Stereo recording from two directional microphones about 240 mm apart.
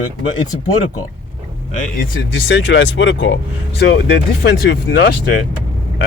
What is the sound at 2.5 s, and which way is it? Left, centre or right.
Speech, left.